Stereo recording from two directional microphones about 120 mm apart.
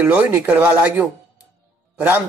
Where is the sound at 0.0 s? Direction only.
15° right (ahead or behind).